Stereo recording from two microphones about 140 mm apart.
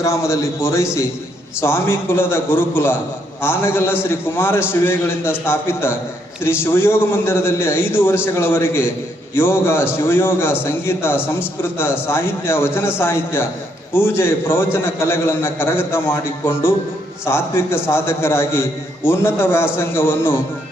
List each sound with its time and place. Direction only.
0.0 s a man's voice: 20° left (ahead or behind)